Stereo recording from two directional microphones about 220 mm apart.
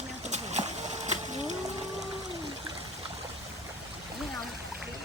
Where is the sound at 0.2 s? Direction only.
30° right (ahead or behind).